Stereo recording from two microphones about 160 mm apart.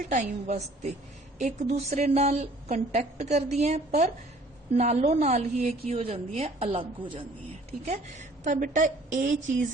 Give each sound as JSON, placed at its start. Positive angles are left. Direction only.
{"t": 0.1, "sound": "a woman's voice", "side_deg": -45}
{"t": 5.8, "sound": "a woman's voice", "side_deg": -35}